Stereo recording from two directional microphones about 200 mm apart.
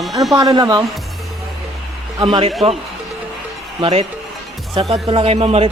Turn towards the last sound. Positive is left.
turn(degrees=-30)  # may be behind; listen again after turning